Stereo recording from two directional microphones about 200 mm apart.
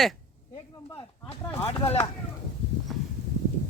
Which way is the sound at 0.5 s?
20° left (ahead or behind).